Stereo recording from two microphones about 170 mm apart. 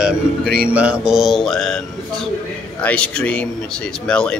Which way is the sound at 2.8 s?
5° left (ahead or behind).